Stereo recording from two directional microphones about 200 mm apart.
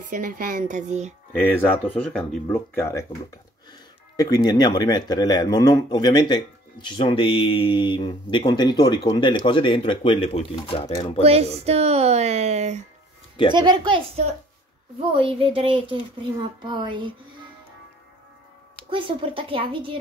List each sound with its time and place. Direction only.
0.0 s speech: 45° right (ahead or behind)
1.4 s speech: 10° left (ahead or behind)
4.2 s speech: 20° left (ahead or behind)
11.1 s speech: 30° right (ahead or behind)
13.5 s a woman's voice: 25° right (ahead or behind)
18.9 s a woman's voice: 25° right (ahead or behind)